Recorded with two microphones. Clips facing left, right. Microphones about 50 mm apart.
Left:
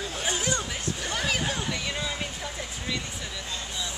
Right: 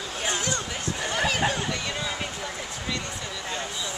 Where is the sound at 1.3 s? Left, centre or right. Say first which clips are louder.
Right 3 dB; centre.